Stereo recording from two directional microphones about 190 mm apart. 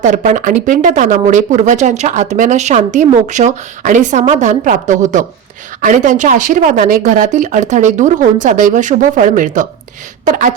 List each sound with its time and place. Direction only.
0.0 s speech: 40° right (ahead or behind)